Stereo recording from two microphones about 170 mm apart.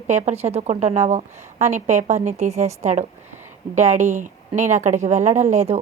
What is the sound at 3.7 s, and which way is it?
A woman's voice, 45° right (ahead or behind).